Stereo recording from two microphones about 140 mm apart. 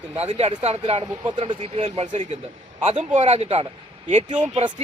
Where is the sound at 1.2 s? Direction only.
30° right (ahead or behind).